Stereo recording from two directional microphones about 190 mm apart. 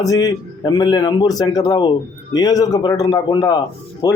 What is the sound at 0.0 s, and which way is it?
Speech, 20° left (ahead or behind).